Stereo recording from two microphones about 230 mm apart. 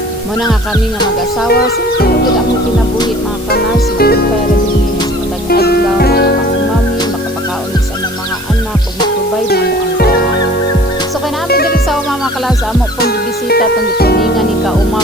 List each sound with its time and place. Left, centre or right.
3.5 s music: left
5.5 s music: left
9.5 s music: left
11.4 s music: left